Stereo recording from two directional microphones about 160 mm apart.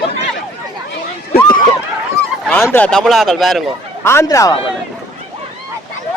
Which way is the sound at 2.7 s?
5° left (ahead or behind).